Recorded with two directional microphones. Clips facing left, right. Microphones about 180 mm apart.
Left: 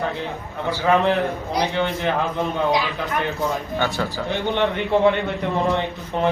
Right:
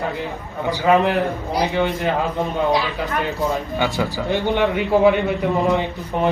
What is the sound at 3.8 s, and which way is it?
Speech, 15° right (ahead or behind).